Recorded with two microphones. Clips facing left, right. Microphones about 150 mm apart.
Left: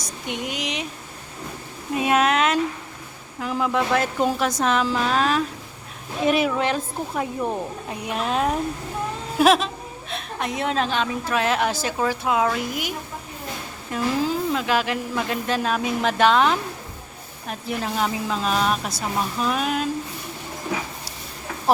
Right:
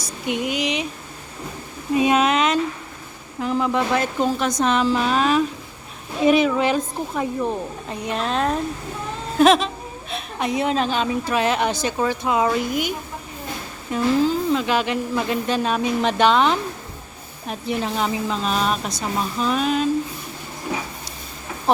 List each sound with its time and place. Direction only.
0.0 s speech: 5° right (ahead or behind)
2.0 s a woman's voice: centre (ahead or behind)
13.9 s a woman's voice: centre (ahead or behind)